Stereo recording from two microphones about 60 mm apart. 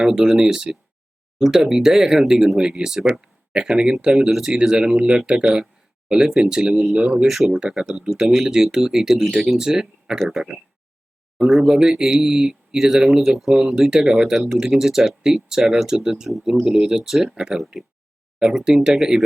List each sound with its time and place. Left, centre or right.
0.0 s speech: centre
7.3 s speech: centre